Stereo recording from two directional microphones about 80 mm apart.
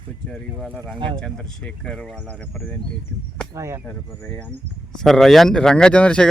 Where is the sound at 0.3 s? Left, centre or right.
Centre.